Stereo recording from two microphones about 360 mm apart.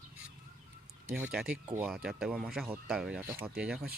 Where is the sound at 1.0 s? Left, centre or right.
Centre.